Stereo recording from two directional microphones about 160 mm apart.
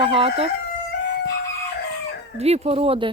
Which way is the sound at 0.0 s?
35° right (ahead or behind).